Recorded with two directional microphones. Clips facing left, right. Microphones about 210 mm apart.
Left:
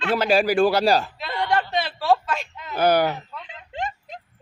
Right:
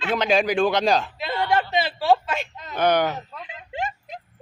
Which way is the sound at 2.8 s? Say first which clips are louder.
Left 1 dB; 10° left (ahead or behind).